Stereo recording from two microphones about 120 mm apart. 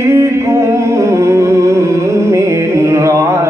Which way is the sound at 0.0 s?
20° right (ahead or behind).